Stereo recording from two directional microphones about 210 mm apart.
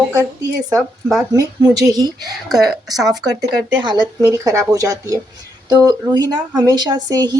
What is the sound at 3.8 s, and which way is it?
Speech, 20° right (ahead or behind).